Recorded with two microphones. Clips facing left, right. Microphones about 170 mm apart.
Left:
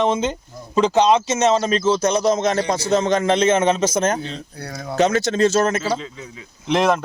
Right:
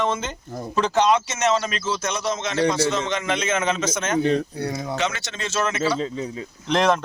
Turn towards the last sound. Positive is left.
turn(degrees=5)  # may be behind; listen again after turning